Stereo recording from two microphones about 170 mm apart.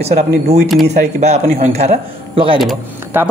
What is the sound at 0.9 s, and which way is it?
Speech, 40° right (ahead or behind).